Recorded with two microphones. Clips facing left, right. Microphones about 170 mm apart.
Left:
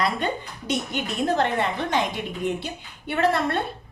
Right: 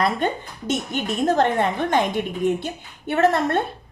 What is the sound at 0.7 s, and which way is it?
Speech, 50° right (ahead or behind).